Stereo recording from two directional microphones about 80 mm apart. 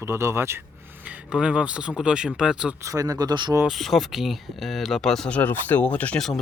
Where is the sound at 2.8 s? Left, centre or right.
Right.